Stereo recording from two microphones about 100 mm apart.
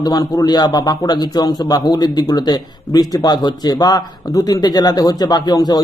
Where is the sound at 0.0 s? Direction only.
40° left (ahead or behind).